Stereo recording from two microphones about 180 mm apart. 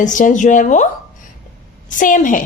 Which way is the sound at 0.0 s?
45° left (ahead or behind).